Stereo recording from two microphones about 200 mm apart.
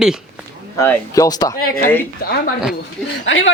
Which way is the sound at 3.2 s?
70° left (ahead or behind).